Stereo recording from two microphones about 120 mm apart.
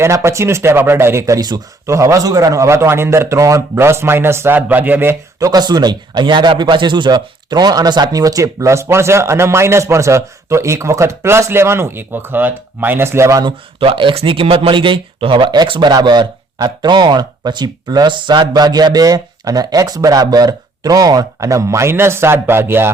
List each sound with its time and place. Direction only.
0.0 s speech: 20° right (ahead or behind)
1.4 s speech: 35° right (ahead or behind); by 5.1 s 15° right (ahead or behind)
5.4 s speech: 35° right (ahead or behind)
13.4 s speech: 45° right (ahead or behind); by 22.9 s 20° right (ahead or behind)